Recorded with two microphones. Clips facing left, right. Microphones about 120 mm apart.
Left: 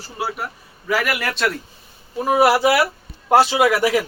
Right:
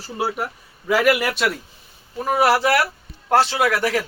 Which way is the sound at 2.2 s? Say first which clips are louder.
Left 2 dB; 5° left (ahead or behind).